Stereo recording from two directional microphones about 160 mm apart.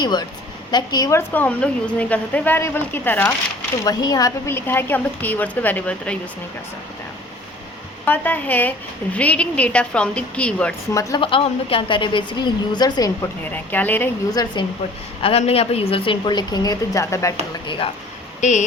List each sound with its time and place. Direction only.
0.0 s a woman's voice: 25° left (ahead or behind)
1.3 s a woman's voice: 10° left (ahead or behind)
3.8 s a woman's voice: 25° left (ahead or behind); by 6.1 s 5° left (ahead or behind)
8.0 s a woman's voice: 10° left (ahead or behind)
10.9 s a woman's voice: 25° left (ahead or behind)
13.5 s a woman's voice: 10° left (ahead or behind)
14.4 s a woman's voice: 25° left (ahead or behind)
15.2 s a woman's voice: 40° left (ahead or behind); by 17.3 s 20° left (ahead or behind)
17.7 s a woman's voice: 35° left (ahead or behind)
18.3 s speech: 50° left (ahead or behind)